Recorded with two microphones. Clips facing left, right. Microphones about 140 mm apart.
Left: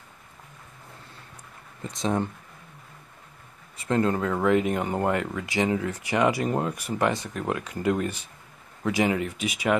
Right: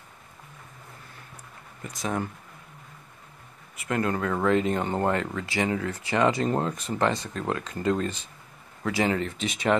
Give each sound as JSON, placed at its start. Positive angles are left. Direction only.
{"t": 1.8, "sound": "speech", "side_deg": 25}
{"t": 3.8, "sound": "speech", "side_deg": 25}